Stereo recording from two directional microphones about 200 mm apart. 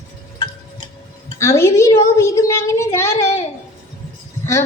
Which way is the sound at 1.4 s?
15° left (ahead or behind).